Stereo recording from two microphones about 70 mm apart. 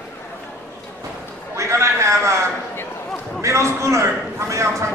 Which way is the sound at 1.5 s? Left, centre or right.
Right.